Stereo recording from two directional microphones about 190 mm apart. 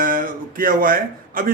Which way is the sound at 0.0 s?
45° right (ahead or behind).